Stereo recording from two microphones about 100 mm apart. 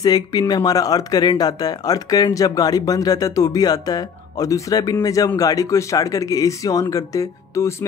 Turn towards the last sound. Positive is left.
turn(degrees=30)  # may be behind; listen again after turning